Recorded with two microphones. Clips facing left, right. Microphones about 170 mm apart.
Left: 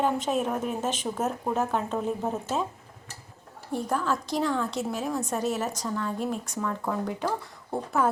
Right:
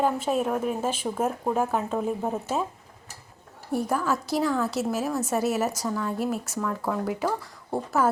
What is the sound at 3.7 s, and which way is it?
A woman's voice, 10° right (ahead or behind).